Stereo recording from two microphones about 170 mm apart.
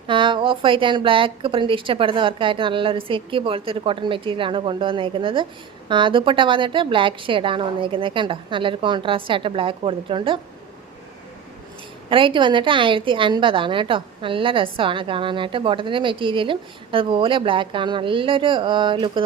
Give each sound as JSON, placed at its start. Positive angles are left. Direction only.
{"t": 0.1, "sound": "a woman's voice", "side_deg": -30}
{"t": 12.0, "sound": "a woman's voice", "side_deg": -30}